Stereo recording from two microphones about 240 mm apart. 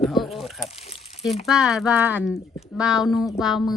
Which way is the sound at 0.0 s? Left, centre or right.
Centre.